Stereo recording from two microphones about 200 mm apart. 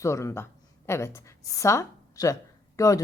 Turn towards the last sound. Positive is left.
turn(degrees=15)  # may be behind; listen again after turning